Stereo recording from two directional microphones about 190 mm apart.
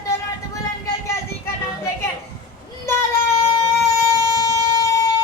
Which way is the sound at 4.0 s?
20° left (ahead or behind).